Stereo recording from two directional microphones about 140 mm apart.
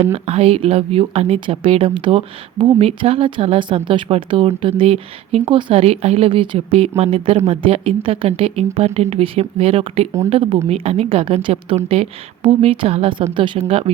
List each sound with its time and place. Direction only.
0.0 s speech: 50° right (ahead or behind)